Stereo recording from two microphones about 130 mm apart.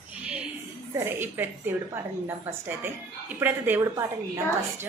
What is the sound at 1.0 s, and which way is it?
A woman's voice, 15° right (ahead or behind).